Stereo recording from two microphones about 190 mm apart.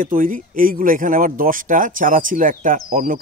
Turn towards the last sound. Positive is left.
turn(degrees=-45)  # may be behind; listen again after turning